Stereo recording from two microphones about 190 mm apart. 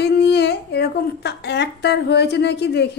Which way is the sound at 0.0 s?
60° left (ahead or behind).